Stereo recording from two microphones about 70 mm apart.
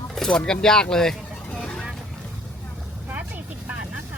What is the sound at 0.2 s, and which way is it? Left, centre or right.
Speech, centre.